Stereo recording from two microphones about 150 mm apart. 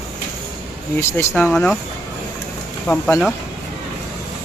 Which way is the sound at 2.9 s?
5° left (ahead or behind).